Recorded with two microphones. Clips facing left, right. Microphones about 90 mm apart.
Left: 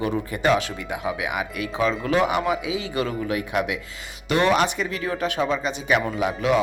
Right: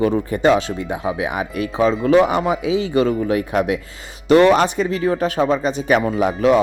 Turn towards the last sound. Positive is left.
turn(degrees=-40)  # may be behind; listen again after turning